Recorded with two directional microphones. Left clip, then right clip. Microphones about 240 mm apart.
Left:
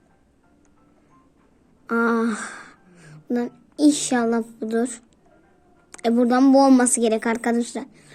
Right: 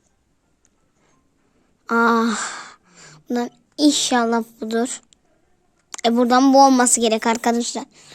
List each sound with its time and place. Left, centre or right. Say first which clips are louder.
1.9 s a woman's voice: right 5 dB; right